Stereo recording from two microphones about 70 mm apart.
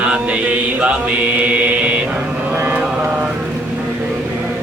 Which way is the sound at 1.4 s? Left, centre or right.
Centre.